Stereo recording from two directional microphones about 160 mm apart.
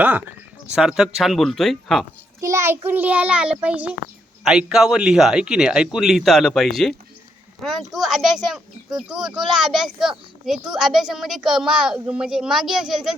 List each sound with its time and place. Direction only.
0.0 s a child's voice: 10° right (ahead or behind)
2.4 s a child's voice: 15° right (ahead or behind)